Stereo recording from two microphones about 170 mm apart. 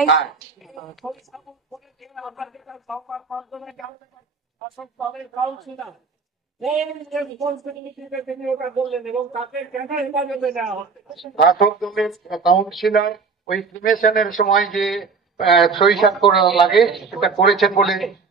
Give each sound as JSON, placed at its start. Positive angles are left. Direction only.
{"t": 0.2, "sound": "speech", "side_deg": 0}
{"t": 11.3, "sound": "speech", "side_deg": 65}
{"t": 11.8, "sound": "speech", "side_deg": 0}
{"t": 13.7, "sound": "speech", "side_deg": 55}
{"t": 14.5, "sound": "speech", "side_deg": 0}